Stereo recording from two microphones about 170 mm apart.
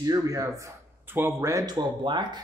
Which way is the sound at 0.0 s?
20° right (ahead or behind).